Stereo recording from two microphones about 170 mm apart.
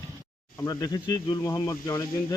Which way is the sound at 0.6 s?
20° left (ahead or behind).